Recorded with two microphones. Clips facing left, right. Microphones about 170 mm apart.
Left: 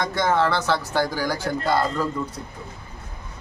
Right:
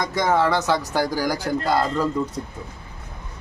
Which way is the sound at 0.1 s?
15° right (ahead or behind).